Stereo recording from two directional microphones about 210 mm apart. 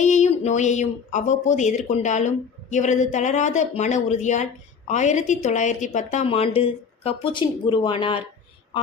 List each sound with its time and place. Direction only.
0.0 s speech: 35° left (ahead or behind)